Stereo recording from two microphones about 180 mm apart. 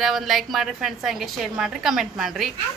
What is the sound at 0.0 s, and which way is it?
A woman's voice, centre (ahead or behind).